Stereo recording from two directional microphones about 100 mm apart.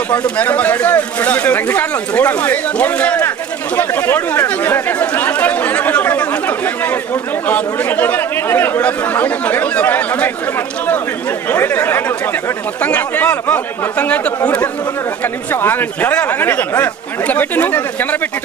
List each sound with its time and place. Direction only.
0.3 s speech: 15° left (ahead or behind)
7.4 s speech: 15° left (ahead or behind)
11.4 s speech: 20° left (ahead or behind)